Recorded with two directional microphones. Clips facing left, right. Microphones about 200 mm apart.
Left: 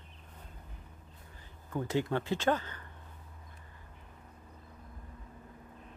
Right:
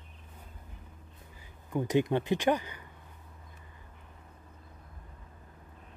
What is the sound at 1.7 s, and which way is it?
Speech, 15° right (ahead or behind).